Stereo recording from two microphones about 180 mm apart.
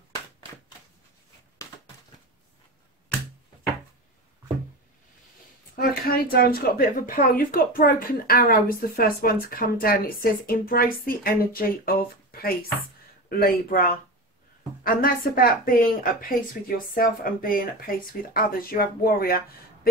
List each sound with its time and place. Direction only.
5.8 s a woman's voice: 55° left (ahead or behind)